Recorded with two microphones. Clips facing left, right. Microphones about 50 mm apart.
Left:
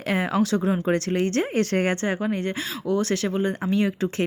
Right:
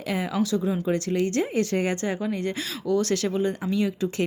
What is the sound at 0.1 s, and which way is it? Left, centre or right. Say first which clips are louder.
Speech: left 3 dB; left.